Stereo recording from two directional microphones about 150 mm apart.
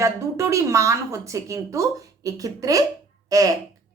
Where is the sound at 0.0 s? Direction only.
20° right (ahead or behind).